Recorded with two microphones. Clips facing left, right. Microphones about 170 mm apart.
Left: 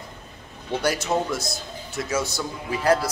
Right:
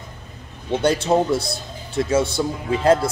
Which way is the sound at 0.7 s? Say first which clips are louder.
Right 6 dB; 25° right (ahead or behind).